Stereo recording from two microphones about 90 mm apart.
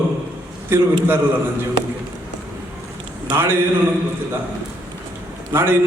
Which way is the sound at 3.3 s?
25° right (ahead or behind).